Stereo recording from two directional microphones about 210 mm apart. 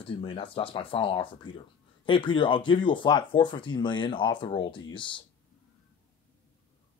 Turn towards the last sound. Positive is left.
turn(degrees=25)  # may be behind; listen again after turning